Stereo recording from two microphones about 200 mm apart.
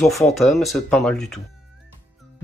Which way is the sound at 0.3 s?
Centre (ahead or behind).